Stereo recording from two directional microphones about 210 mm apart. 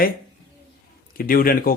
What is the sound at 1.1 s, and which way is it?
Speech, 45° left (ahead or behind).